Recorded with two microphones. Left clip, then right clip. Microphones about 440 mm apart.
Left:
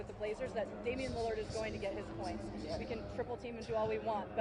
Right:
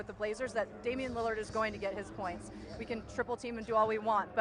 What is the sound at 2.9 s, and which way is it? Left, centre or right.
Speech, right.